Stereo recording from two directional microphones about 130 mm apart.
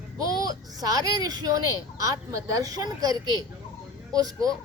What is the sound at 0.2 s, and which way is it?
A child's voice, 30° right (ahead or behind).